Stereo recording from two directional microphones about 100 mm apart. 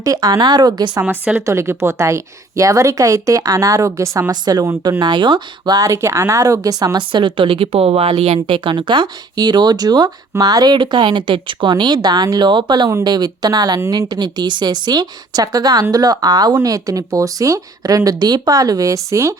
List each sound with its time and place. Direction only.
0.0 s speech: 40° right (ahead or behind)
1.0 s a woman's voice: 15° right (ahead or behind)
1.4 s a woman's voice: 25° right (ahead or behind)
4.3 s a woman's voice: 40° right (ahead or behind)